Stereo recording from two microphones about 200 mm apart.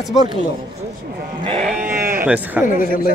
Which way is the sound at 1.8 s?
40° right (ahead or behind).